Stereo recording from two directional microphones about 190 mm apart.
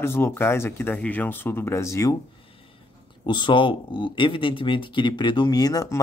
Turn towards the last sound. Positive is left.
turn(degrees=15)  # may be behind; listen again after turning